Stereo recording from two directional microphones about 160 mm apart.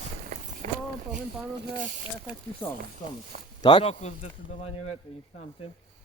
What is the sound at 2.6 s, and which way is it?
Speech, 10° left (ahead or behind).